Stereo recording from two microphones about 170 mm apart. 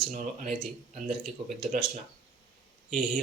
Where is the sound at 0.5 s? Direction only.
30° right (ahead or behind).